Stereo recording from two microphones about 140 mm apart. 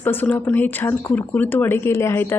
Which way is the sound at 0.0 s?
15° left (ahead or behind).